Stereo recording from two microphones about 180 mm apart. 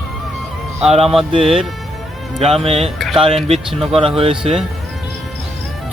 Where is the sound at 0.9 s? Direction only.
35° right (ahead or behind).